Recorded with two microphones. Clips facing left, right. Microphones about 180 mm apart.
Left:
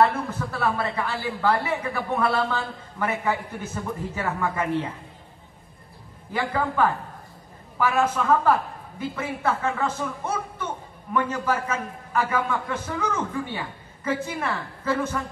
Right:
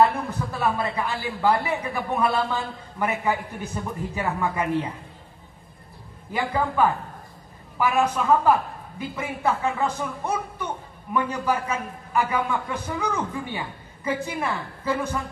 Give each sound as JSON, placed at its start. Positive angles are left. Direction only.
{"t": 0.0, "sound": "a woman's voice", "side_deg": -15}
{"t": 6.3, "sound": "a woman's voice", "side_deg": -15}